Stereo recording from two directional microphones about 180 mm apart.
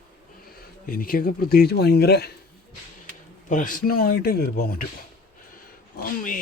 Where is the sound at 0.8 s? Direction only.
55° left (ahead or behind).